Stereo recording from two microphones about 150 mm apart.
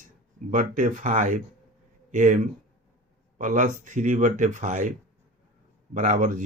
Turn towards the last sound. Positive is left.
turn(degrees=-65)  # may be behind; listen again after turning